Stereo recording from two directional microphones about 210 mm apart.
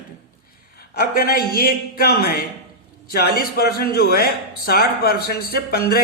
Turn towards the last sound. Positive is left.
turn(degrees=45)  # may be behind; listen again after turning